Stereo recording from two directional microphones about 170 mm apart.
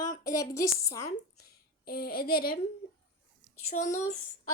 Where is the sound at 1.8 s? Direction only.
60° left (ahead or behind).